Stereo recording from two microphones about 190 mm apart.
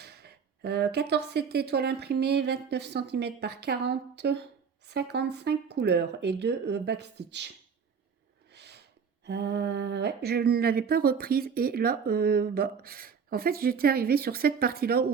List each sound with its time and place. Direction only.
0.0 s speech: 60° right (ahead or behind)
8.5 s snort: 60° right (ahead or behind)
9.2 s speech: 60° right (ahead or behind)